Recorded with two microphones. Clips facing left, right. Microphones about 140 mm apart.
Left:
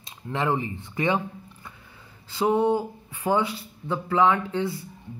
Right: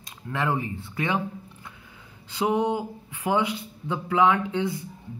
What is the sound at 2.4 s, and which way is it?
Speech, 15° right (ahead or behind).